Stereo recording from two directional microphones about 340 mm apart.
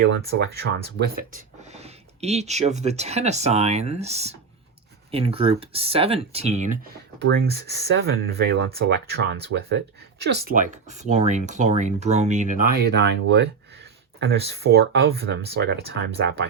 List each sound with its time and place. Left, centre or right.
0.1 s speech: right